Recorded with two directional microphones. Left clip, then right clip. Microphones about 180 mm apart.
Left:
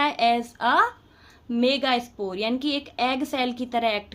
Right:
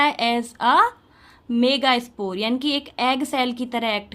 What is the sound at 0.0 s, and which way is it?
A woman's voice, 25° right (ahead or behind).